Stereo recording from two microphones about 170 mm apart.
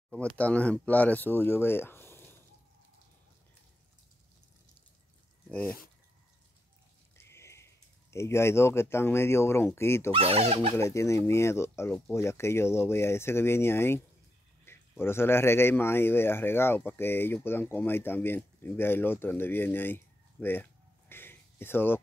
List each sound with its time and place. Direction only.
0.1 s speech: 5° left (ahead or behind)
5.5 s speech: 5° left (ahead or behind)
7.2 s speech: 15° left (ahead or behind)
10.1 s speech: 35° right (ahead or behind)
10.8 s speech: 15° left (ahead or behind)
21.1 s a sound: 15° left (ahead or behind)